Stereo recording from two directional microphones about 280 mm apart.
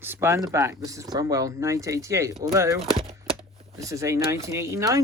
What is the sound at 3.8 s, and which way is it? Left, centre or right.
Speech, centre.